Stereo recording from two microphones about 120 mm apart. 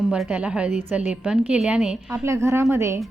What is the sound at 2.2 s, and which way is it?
Speech, 25° right (ahead or behind).